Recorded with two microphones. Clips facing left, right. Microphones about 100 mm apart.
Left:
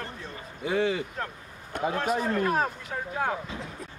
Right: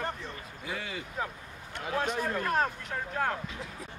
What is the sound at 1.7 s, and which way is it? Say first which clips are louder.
Speech: left 10 dB; 45° left (ahead or behind).